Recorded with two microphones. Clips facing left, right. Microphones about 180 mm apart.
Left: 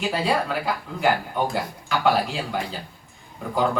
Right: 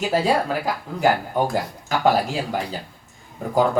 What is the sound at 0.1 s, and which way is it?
Speech, 40° right (ahead or behind).